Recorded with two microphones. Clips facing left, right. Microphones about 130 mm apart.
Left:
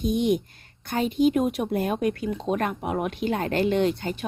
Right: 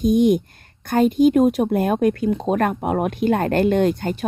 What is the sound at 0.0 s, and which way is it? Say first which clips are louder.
Speech: right 7 dB; 45° right (ahead or behind).